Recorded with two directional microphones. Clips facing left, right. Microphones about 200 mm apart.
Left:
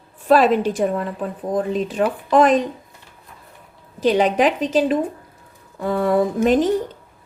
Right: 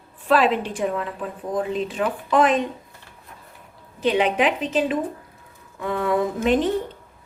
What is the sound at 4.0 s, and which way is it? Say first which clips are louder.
A woman's voice: left 4 dB; 40° left (ahead or behind).